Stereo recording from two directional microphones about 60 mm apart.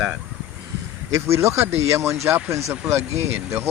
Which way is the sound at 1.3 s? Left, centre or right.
Right.